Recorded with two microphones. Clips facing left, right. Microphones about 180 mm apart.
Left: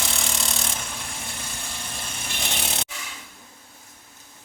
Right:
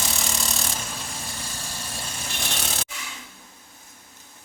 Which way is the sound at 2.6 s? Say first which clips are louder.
Left 1 dB; 20° left (ahead or behind).